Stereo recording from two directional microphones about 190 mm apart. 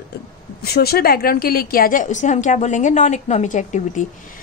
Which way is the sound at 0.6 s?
55° left (ahead or behind).